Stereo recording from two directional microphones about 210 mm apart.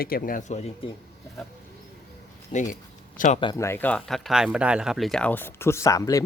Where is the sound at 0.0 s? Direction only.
45° left (ahead or behind).